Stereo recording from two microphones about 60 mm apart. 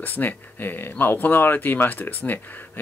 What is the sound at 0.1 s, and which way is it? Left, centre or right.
Speech, left.